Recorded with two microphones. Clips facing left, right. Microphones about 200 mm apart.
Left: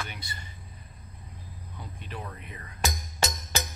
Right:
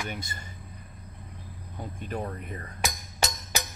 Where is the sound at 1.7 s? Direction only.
45° right (ahead or behind).